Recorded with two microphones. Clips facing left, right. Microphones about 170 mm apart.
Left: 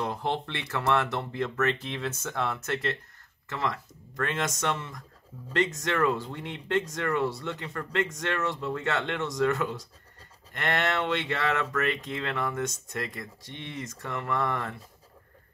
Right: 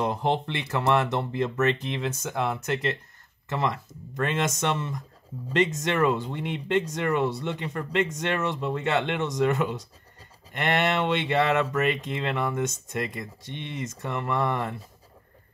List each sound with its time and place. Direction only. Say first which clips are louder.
0.0 s speech: right 5 dB; 20° right (ahead or behind)